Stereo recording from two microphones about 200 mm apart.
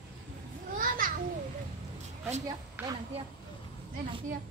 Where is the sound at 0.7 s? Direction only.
45° right (ahead or behind).